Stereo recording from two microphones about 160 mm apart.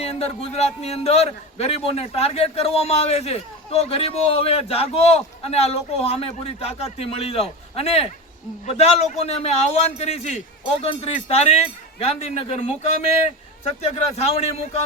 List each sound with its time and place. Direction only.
0.0 s a man's voice: 40° left (ahead or behind)
13.9 s a man's voice: 40° left (ahead or behind)